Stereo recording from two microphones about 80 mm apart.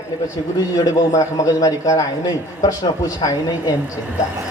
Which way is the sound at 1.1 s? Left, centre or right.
Left.